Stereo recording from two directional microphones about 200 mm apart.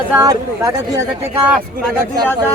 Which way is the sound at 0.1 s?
15° right (ahead or behind).